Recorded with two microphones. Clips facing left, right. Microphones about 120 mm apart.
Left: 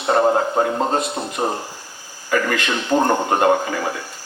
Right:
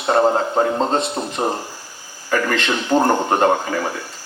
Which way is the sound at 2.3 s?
30° right (ahead or behind).